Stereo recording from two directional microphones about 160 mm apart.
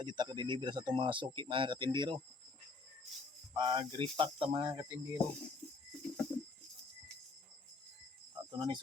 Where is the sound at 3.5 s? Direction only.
30° right (ahead or behind).